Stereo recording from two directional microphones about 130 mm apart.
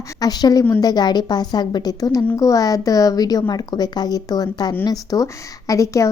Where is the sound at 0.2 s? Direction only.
30° left (ahead or behind).